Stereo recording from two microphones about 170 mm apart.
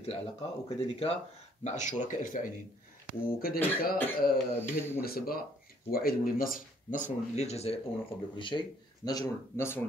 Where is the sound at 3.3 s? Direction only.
60° left (ahead or behind).